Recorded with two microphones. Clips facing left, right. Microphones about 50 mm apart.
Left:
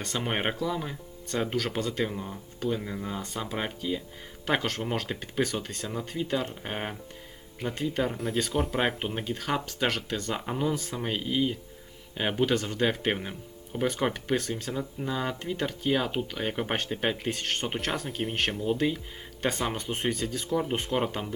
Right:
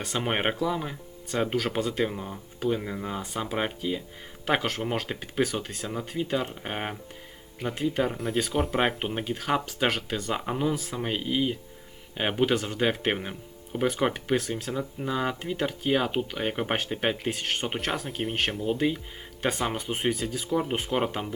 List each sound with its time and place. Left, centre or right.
0.0 s speech: centre